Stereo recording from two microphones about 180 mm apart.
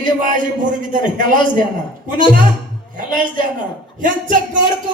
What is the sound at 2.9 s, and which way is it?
A woman's voice, 45° right (ahead or behind).